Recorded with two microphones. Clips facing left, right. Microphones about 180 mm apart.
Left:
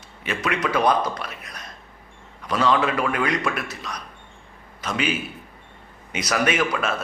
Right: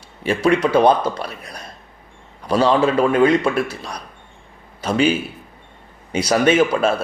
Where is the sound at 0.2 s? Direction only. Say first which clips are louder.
Right 9 dB; 30° right (ahead or behind).